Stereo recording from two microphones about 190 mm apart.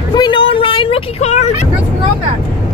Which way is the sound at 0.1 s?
25° left (ahead or behind).